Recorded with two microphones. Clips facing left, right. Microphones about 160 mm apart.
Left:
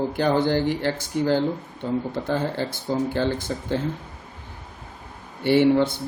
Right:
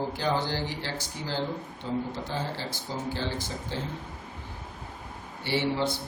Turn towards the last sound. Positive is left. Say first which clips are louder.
# left 10 dB
turn(degrees=55)  # may be behind; listen again after turning